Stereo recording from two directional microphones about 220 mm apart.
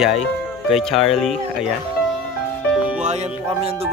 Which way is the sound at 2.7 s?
5° right (ahead or behind).